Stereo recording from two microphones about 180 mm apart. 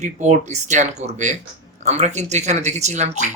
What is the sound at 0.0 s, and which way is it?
Speech, 40° right (ahead or behind).